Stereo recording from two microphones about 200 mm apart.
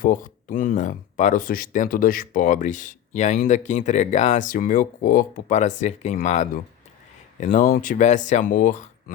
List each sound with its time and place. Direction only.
0.0 s speech: 45° left (ahead or behind)